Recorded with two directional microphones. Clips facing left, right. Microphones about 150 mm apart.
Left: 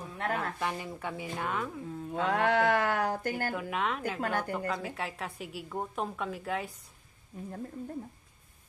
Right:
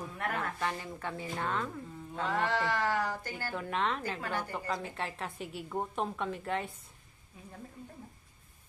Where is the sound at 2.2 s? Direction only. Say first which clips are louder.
Left 5 dB; 65° left (ahead or behind).